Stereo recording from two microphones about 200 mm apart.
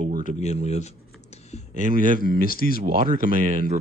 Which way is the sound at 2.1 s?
45° left (ahead or behind).